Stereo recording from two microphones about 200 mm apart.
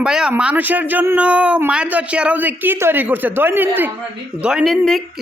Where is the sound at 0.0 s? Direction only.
5° right (ahead or behind).